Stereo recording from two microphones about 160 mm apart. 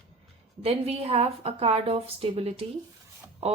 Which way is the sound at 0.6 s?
40° right (ahead or behind).